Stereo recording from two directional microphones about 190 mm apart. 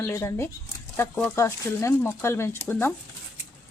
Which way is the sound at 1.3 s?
15° left (ahead or behind).